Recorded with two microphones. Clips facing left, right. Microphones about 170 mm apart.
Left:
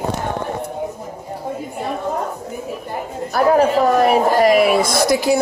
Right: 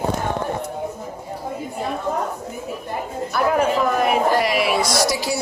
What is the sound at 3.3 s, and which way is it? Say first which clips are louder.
Speech: left 5 dB; 35° left (ahead or behind).